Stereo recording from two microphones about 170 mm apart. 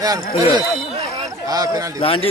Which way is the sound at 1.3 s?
20° right (ahead or behind).